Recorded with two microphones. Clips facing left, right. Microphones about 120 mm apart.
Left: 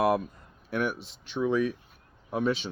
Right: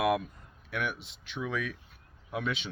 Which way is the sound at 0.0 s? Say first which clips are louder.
Left 3 dB; 35° left (ahead or behind).